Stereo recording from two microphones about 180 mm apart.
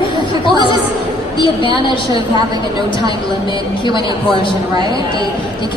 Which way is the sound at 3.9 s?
25° left (ahead or behind).